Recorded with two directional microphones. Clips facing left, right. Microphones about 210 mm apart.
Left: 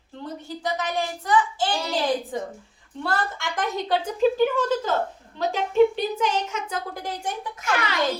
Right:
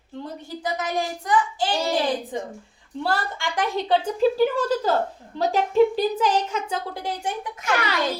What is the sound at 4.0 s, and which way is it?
A woman's voice, 35° right (ahead or behind).